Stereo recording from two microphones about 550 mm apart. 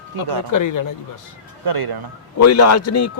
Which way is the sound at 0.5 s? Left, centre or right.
Left.